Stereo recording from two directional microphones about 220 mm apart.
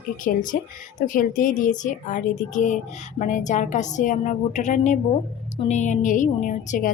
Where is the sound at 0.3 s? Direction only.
40° left (ahead or behind).